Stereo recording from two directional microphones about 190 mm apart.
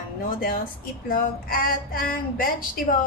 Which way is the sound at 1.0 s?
50° left (ahead or behind).